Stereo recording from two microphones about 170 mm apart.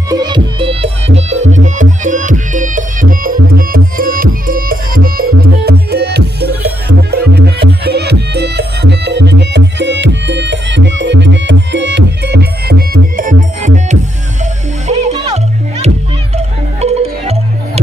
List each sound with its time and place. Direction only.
0.1 s music: 25° right (ahead or behind)
1.3 s music: 45° right (ahead or behind)
15.2 s music: 40° right (ahead or behind)